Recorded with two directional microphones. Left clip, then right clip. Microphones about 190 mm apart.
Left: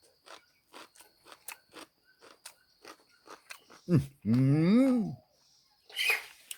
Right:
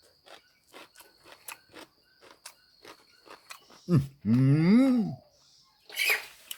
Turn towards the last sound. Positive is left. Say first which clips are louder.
# right 2 dB
turn(degrees=-60)  # may be behind; listen again after turning